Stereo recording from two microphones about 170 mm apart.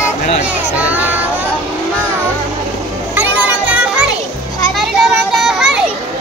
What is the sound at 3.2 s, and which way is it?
Music, 10° right (ahead or behind).